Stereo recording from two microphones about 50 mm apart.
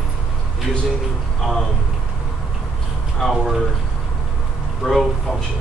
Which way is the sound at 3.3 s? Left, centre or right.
Centre.